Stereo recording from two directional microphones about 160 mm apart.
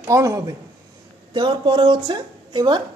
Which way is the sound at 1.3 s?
30° right (ahead or behind).